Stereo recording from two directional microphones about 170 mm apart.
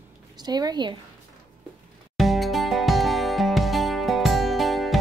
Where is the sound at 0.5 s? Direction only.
25° right (ahead or behind).